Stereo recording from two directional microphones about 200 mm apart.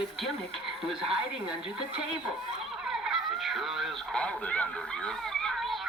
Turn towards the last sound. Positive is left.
turn(degrees=5)  # may be behind; listen again after turning